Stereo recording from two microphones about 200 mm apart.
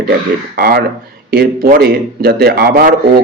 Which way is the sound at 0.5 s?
50° right (ahead or behind).